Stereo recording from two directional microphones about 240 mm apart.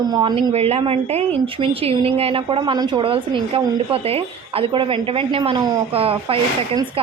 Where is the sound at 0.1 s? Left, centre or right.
Centre.